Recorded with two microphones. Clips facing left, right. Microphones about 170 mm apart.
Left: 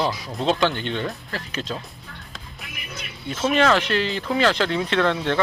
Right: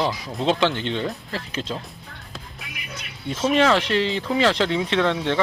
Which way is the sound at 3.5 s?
25° right (ahead or behind).